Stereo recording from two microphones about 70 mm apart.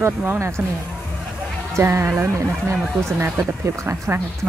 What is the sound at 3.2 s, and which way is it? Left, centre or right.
Speech, right.